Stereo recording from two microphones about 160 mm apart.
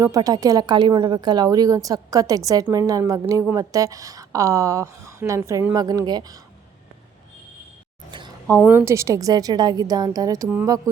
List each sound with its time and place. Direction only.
0.0 s a woman's voice: 20° right (ahead or behind)
8.1 s a sound: 30° right (ahead or behind)
8.6 s a woman's voice: 15° right (ahead or behind)